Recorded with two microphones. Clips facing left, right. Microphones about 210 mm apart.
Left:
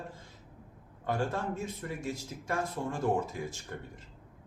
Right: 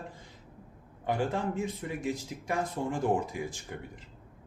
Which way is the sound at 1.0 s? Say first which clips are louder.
Right 2 dB; 15° right (ahead or behind).